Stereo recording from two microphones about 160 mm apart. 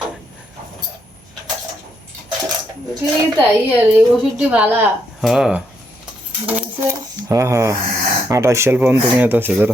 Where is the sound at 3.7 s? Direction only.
10° right (ahead or behind).